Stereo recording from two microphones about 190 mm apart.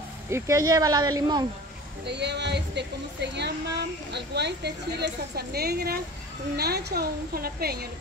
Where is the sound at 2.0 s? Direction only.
65° right (ahead or behind).